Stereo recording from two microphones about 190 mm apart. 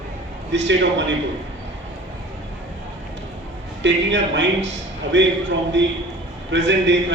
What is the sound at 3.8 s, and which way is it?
A man's voice, 70° right (ahead or behind).